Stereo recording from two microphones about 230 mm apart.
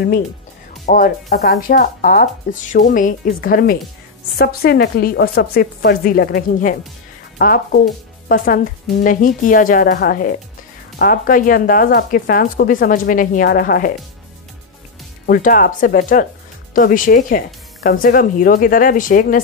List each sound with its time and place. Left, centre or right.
0.8 s speech: left
15.2 s speech: left